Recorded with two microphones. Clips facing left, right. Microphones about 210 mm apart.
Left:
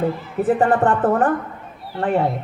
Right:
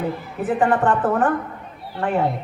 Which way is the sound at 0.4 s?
35° left (ahead or behind).